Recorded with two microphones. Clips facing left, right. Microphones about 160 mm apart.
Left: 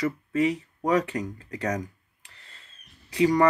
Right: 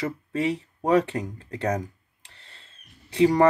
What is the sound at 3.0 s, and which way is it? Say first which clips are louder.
Speech: right 2 dB; 30° right (ahead or behind).